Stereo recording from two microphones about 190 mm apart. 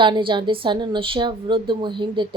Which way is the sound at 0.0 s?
25° right (ahead or behind).